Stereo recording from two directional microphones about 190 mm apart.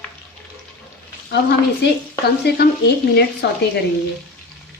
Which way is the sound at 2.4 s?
60° left (ahead or behind).